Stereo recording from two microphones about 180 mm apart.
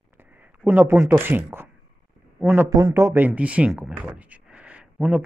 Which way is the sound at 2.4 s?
15° right (ahead or behind).